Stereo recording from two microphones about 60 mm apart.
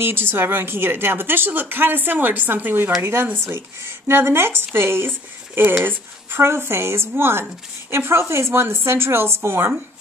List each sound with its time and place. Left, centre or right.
0.0 s a woman's voice: right